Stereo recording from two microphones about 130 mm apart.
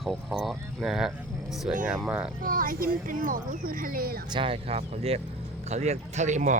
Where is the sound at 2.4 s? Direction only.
90° right.